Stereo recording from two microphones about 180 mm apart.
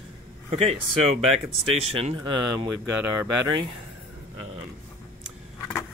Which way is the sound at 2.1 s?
25° right (ahead or behind).